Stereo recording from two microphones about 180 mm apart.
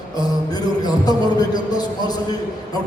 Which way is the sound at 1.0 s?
20° left (ahead or behind).